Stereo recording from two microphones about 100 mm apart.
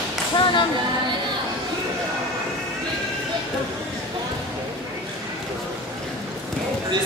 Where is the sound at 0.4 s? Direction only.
55° left (ahead or behind).